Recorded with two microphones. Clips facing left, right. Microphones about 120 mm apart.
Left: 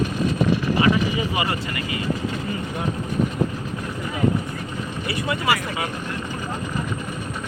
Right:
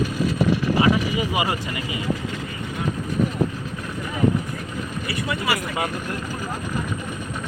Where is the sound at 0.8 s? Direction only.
15° right (ahead or behind).